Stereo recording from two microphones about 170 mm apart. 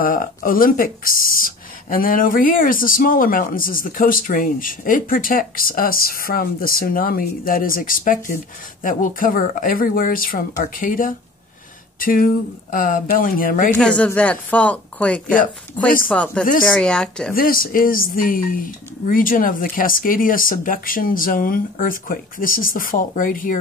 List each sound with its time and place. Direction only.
0.0 s speech: 55° left (ahead or behind)
13.7 s a woman's voice: 5° left (ahead or behind)
17.3 s speech: 55° left (ahead or behind)